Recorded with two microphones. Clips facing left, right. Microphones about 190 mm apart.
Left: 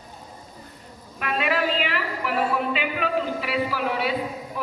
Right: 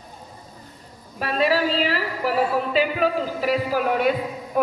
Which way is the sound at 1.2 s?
35° right (ahead or behind).